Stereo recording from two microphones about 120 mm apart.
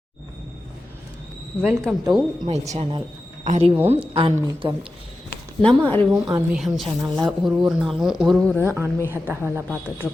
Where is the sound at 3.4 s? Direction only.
90° right.